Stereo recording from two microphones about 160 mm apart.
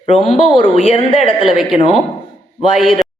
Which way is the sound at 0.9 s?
35° left (ahead or behind).